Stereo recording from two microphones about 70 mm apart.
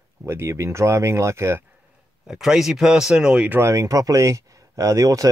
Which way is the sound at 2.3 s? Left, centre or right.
Centre.